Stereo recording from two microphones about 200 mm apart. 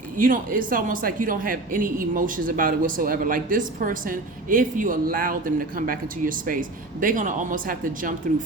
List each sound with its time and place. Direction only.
0.2 s speech: 45° right (ahead or behind)